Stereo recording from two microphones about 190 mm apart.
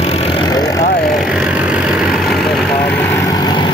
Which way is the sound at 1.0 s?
Centre (ahead or behind).